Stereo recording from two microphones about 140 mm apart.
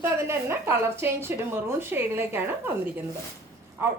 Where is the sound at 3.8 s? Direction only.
15° right (ahead or behind).